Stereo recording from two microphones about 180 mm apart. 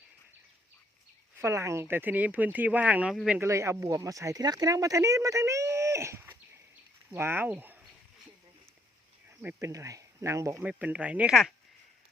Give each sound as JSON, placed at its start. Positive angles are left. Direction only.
{"t": 1.4, "sound": "speech", "side_deg": -15}
{"t": 9.4, "sound": "speech", "side_deg": -10}